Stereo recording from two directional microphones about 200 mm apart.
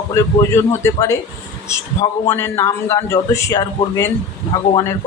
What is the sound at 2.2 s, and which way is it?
A man's voice, 15° left (ahead or behind).